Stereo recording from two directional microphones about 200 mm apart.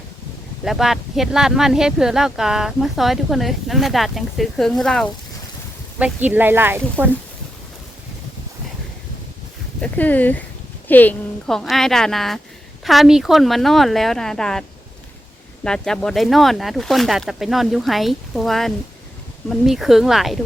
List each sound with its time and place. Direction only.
0.6 s speech: centre (ahead or behind)
6.0 s speech: 10° right (ahead or behind)
9.8 s speech: 10° left (ahead or behind)
15.6 s speech: 5° left (ahead or behind)